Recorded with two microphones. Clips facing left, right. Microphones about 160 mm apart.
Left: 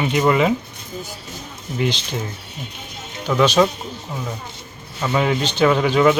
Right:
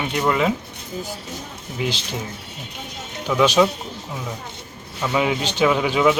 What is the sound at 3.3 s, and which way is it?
Speech, 5° right (ahead or behind).